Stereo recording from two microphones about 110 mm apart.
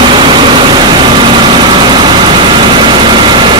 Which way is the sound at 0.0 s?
45° right (ahead or behind).